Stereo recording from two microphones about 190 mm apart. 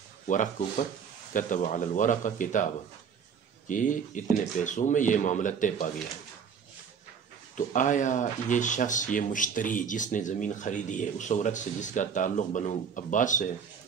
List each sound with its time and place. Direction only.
0.3 s speech: 40° left (ahead or behind)
7.5 s speech: 40° left (ahead or behind)